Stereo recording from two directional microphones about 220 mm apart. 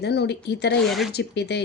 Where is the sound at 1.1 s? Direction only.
50° left (ahead or behind).